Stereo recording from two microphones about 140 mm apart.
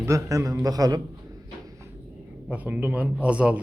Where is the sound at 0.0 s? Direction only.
20° right (ahead or behind).